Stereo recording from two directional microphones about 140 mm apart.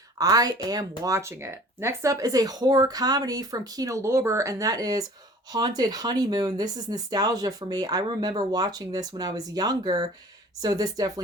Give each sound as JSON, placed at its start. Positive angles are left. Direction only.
{"t": 0.2, "sound": "speech", "side_deg": -25}